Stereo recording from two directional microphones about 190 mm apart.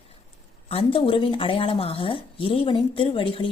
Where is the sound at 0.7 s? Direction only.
30° left (ahead or behind).